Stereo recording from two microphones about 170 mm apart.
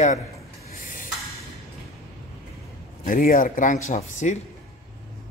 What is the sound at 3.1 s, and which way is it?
Speech, 55° left (ahead or behind).